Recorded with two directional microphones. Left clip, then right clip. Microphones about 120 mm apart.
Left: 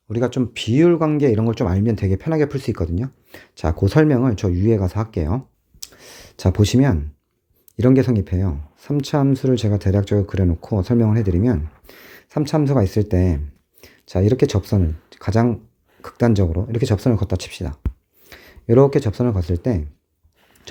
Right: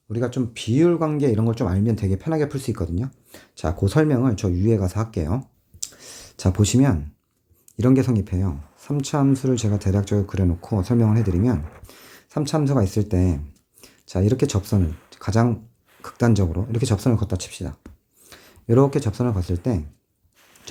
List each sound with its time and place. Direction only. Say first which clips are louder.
0.1 s speech: left 4 dB; 75° left (ahead or behind); by 5.4 s 40° left (ahead or behind)
5.8 s clicking: right 2 dB; 50° left (ahead or behind)
7.8 s speech: left 3 dB; 40° left (ahead or behind)